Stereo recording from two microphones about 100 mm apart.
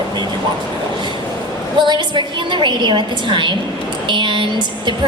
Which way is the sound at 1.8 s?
50° right (ahead or behind).